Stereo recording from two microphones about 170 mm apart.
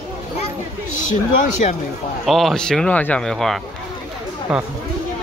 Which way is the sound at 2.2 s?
Centre (ahead or behind).